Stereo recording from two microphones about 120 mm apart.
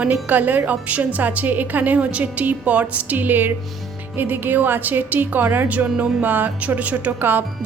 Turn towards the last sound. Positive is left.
turn(degrees=-15)  # may be behind; listen again after turning